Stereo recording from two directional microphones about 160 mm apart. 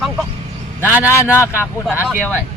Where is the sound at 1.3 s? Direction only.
15° left (ahead or behind).